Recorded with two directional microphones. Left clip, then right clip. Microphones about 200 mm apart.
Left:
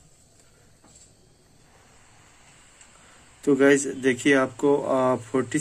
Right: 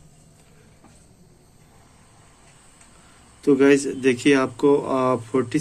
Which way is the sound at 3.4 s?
25° left (ahead or behind).